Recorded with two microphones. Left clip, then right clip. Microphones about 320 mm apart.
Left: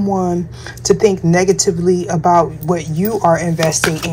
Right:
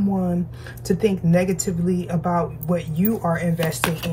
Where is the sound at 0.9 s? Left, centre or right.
Centre.